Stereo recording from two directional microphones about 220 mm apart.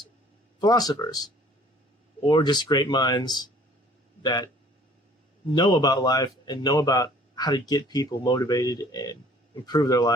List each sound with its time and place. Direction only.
0.6 s speech: 15° left (ahead or behind)
5.5 s speech: 20° left (ahead or behind)